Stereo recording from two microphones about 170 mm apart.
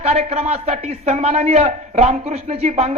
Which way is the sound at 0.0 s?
40° right (ahead or behind).